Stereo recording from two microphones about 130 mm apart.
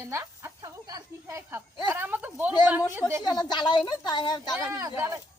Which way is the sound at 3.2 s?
35° left (ahead or behind).